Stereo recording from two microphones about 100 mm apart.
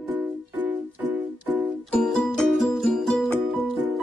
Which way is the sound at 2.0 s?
Centre (ahead or behind).